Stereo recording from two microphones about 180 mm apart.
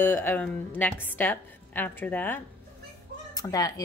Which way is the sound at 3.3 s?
20° left (ahead or behind).